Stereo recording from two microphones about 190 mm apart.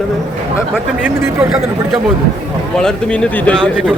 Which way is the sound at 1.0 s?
10° right (ahead or behind).